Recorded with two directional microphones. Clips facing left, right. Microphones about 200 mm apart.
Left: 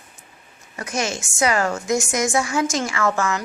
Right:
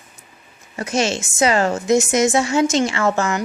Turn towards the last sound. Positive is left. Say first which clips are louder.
# right 2 dB
turn(degrees=-25)  # may be behind; listen again after turning